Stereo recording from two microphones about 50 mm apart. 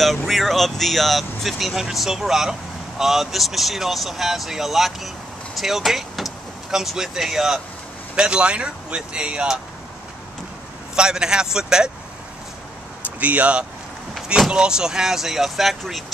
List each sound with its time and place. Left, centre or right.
0.0 s speech: centre
8.2 s speech: right
11.0 s speech: centre
13.2 s speech: right
14.5 s speech: centre